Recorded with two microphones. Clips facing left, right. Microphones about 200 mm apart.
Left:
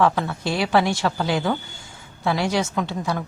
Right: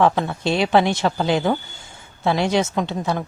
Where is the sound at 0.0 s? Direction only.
25° right (ahead or behind).